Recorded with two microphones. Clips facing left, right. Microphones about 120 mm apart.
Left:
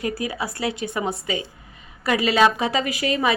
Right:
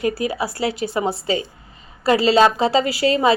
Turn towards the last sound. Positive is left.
turn(degrees=-30)  # may be behind; listen again after turning